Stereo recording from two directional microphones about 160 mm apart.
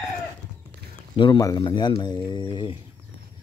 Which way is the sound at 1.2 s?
25° left (ahead or behind).